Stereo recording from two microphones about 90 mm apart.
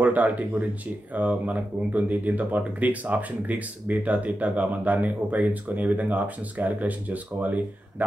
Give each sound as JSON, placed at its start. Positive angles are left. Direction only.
{"t": 0.0, "sound": "speech", "side_deg": -20}